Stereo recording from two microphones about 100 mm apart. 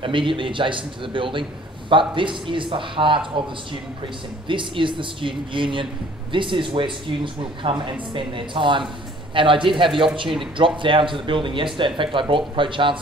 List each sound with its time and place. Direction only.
0.0 s speech: 60° right (ahead or behind)